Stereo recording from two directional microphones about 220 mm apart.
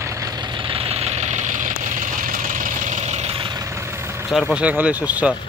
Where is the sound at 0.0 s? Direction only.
15° right (ahead or behind).